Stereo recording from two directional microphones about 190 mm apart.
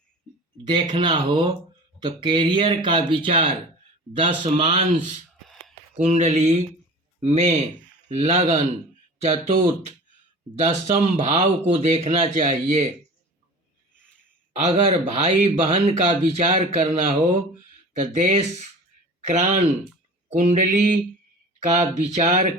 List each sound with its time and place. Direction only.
0.6 s speech: 25° right (ahead or behind)
6.0 s speech: 35° right (ahead or behind)
14.5 s speech: 35° right (ahead or behind)